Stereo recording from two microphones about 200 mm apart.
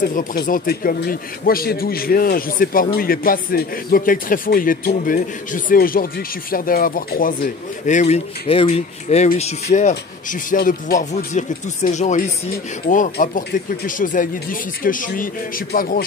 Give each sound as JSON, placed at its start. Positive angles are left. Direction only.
{"t": 0.0, "sound": "a man's voice", "side_deg": 45}